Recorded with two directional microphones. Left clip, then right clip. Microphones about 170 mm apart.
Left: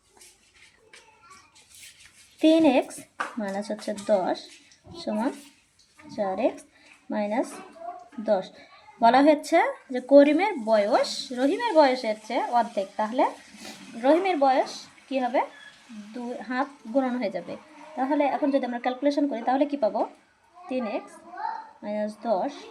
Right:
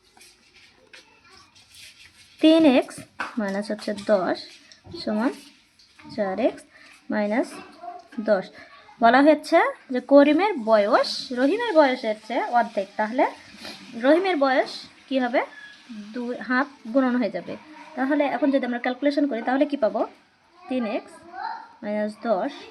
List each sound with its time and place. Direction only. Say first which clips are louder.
2.4 s a woman's voice: right 3 dB; 20° right (ahead or behind)
14.0 s a woman's voice: right 1 dB; 25° right (ahead or behind)